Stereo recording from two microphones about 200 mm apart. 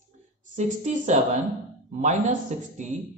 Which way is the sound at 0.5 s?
35° right (ahead or behind).